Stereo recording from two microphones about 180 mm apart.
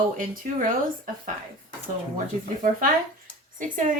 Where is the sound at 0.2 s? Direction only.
45° right (ahead or behind).